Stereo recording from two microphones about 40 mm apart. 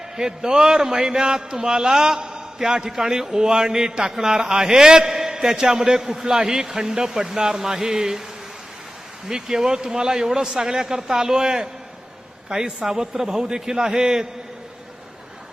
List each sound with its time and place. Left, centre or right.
0.2 s a man's voice: centre
9.2 s a man's voice: centre